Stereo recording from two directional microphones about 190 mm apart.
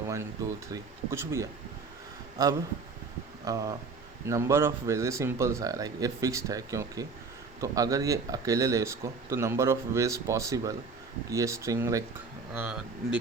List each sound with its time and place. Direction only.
0.7 s speech: 15° right (ahead or behind)
12.5 s speech: 5° right (ahead or behind)